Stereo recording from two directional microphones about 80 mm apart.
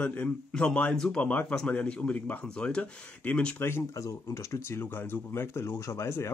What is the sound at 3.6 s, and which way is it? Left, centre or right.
Speech, left.